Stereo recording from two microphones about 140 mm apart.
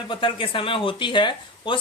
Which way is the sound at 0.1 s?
35° left (ahead or behind).